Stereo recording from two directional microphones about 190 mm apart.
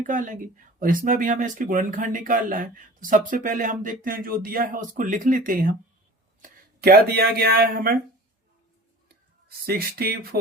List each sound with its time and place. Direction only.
0.0 s speech: 45° right (ahead or behind)
9.6 s speech: 55° right (ahead or behind)